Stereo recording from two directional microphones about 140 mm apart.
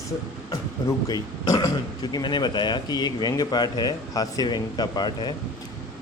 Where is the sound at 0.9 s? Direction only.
25° left (ahead or behind).